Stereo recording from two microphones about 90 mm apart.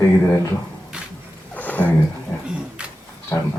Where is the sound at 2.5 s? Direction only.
10° right (ahead or behind).